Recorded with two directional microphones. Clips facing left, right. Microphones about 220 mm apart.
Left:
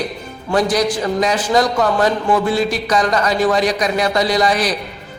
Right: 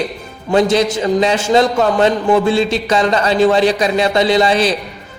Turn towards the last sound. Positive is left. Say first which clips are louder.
# right 4 dB
turn(degrees=-25)  # may be behind; listen again after turning